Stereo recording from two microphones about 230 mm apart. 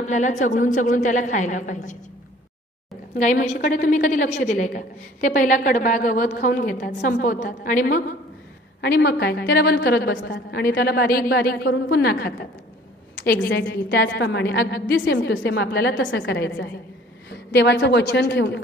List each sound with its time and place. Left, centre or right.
0.0 s a woman's voice: left
3.2 s a woman's voice: left